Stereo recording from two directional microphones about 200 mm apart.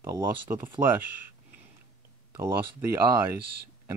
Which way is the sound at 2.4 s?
15° right (ahead or behind).